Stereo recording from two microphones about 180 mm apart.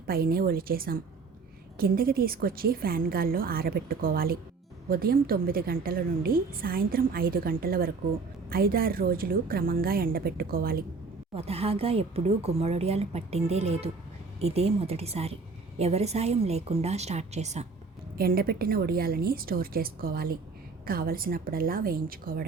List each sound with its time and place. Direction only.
0.1 s a woman's voice: 55° right (ahead or behind)
11.3 s speech: 35° right (ahead or behind)
18.2 s a woman's voice: 55° right (ahead or behind)